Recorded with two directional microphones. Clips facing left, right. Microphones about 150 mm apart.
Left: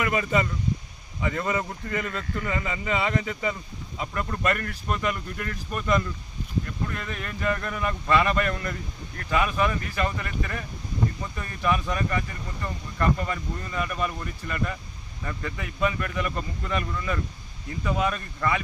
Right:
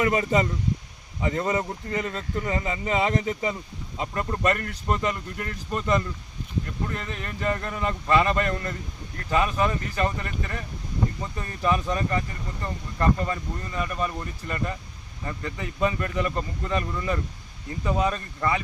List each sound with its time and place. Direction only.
0.0 s speech: 30° right (ahead or behind)